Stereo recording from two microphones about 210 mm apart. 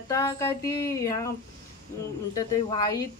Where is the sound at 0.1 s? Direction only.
15° left (ahead or behind).